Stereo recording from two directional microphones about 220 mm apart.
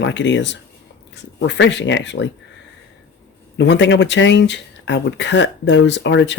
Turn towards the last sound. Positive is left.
turn(degrees=55)  # may be behind; listen again after turning